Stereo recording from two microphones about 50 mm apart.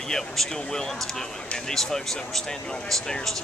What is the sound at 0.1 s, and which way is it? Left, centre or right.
Speech, centre.